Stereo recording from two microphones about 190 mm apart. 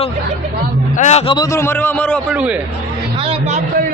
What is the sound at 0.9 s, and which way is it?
Speech, 40° left (ahead or behind).